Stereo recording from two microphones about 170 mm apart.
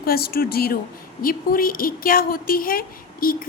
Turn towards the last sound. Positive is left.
turn(degrees=55)  # may be behind; listen again after turning